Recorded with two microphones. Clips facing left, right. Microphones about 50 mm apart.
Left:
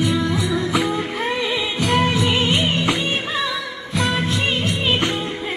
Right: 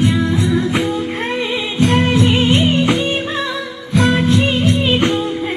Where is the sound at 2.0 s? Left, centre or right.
Right.